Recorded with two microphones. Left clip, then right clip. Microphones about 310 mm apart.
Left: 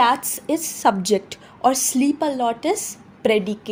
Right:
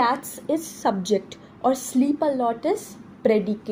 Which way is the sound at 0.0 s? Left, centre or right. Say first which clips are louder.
Left 5 dB; left.